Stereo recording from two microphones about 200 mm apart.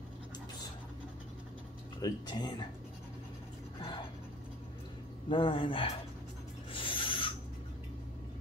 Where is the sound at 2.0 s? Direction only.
20° left (ahead or behind).